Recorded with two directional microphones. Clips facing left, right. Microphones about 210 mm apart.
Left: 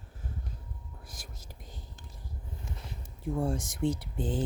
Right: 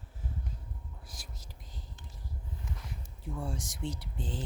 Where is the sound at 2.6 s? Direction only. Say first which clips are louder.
Left 1 dB; 25° left (ahead or behind).